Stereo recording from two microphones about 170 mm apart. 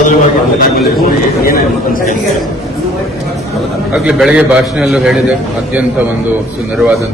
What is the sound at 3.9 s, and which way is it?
A man's voice, 5° right (ahead or behind).